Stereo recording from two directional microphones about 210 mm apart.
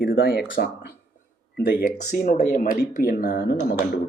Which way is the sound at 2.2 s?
40° left (ahead or behind).